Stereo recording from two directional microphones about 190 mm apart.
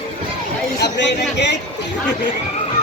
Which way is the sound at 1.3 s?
65° left (ahead or behind).